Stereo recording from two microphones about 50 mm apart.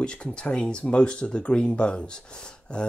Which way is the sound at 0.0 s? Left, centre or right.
Centre.